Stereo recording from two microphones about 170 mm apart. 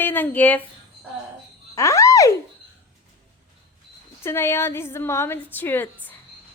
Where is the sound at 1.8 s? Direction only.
20° left (ahead or behind).